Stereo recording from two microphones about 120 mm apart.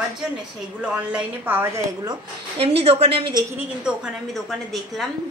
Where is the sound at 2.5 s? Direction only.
55° right (ahead or behind).